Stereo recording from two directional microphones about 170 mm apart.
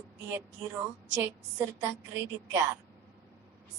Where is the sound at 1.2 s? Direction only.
10° right (ahead or behind).